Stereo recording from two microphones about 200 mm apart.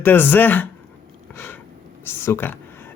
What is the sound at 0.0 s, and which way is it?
Speech, 10° left (ahead or behind).